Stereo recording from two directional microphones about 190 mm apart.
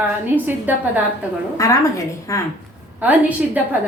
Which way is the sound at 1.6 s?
15° left (ahead or behind).